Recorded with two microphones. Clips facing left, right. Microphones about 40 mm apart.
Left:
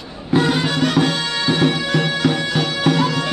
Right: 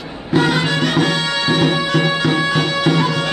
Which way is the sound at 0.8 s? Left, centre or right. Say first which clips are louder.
Right 1 dB; right.